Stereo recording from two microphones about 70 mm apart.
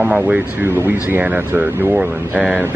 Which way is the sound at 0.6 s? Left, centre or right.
Right.